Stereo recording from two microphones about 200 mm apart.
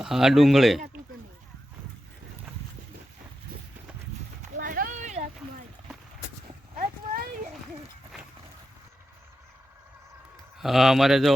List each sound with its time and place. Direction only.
0.0 s speech: centre (ahead or behind)
4.6 s a sound: 45° right (ahead or behind)
6.7 s clip-clop: 45° right (ahead or behind)
10.6 s speech: centre (ahead or behind)